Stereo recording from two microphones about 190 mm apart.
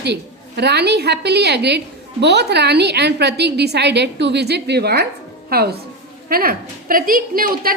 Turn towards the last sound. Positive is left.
turn(degrees=-50)  # may be behind; listen again after turning